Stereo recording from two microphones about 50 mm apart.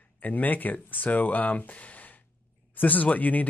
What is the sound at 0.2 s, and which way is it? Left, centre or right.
Speech, left.